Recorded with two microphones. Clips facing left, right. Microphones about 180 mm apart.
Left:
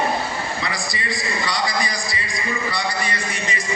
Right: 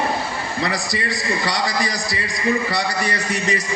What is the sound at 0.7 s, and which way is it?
A man's voice, 75° right (ahead or behind).